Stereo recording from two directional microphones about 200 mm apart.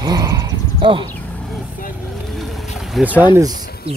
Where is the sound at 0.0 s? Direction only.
20° right (ahead or behind).